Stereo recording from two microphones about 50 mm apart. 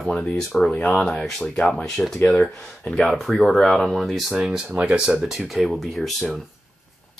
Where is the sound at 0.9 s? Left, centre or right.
Centre.